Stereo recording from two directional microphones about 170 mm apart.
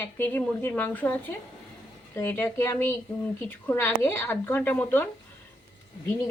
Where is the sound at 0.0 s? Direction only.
10° left (ahead or behind).